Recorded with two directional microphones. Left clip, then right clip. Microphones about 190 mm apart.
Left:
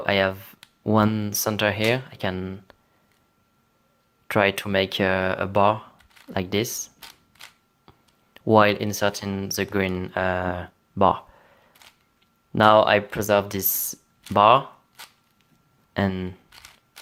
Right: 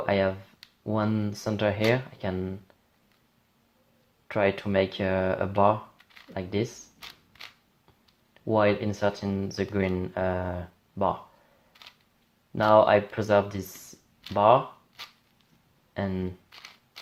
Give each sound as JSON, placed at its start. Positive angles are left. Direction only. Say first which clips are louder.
{"t": 0.0, "sound": "speech", "louder": "left 4 dB", "side_deg": 40}
{"t": 4.3, "sound": "speech", "louder": "left 5 dB", "side_deg": 40}
{"t": 7.1, "sound": "a sound", "louder": "even", "side_deg": 5}
{"t": 7.9, "sound": "speech", "louder": "left 8 dB", "side_deg": 40}
{"t": 12.5, "sound": "speech", "louder": "left 3 dB", "side_deg": 40}
{"t": 16.0, "sound": "speech", "louder": "left 6 dB", "side_deg": 40}